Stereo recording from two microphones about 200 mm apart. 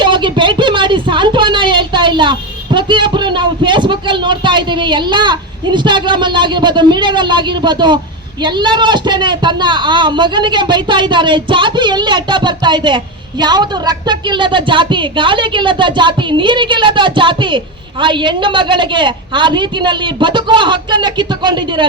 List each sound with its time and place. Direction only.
0.0 s a man's voice: 25° right (ahead or behind)